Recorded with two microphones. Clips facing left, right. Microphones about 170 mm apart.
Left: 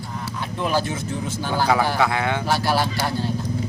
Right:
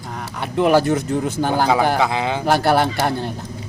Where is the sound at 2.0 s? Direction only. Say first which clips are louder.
Right 2 dB; 20° right (ahead or behind).